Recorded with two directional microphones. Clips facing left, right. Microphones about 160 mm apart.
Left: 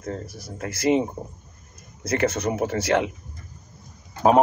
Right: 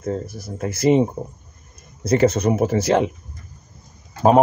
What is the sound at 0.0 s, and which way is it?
Speech, 25° right (ahead or behind).